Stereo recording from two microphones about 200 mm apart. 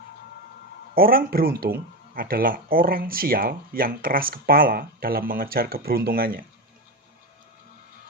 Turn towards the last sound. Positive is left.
turn(degrees=-45)  # may be behind; listen again after turning